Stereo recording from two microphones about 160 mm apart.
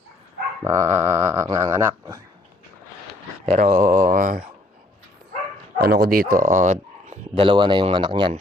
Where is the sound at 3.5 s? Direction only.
50° right (ahead or behind).